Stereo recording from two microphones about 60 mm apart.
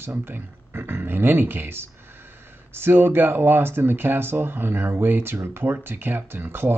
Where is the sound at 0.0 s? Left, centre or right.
Right.